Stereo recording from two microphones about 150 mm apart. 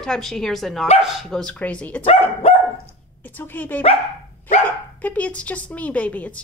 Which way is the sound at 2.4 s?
40° left (ahead or behind).